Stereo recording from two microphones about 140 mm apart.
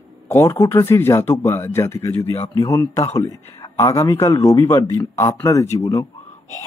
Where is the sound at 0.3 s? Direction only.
20° left (ahead or behind).